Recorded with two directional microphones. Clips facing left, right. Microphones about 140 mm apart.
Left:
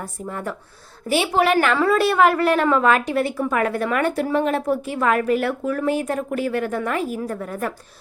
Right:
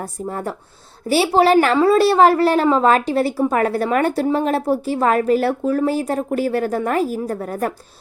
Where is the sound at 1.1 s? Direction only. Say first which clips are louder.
Right 4 dB; 35° right (ahead or behind).